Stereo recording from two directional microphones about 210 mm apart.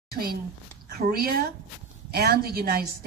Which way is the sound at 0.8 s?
45° right (ahead or behind).